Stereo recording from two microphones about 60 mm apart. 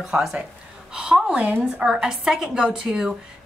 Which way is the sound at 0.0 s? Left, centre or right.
Centre.